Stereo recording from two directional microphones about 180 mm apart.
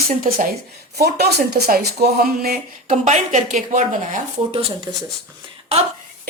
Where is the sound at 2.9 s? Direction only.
40° right (ahead or behind).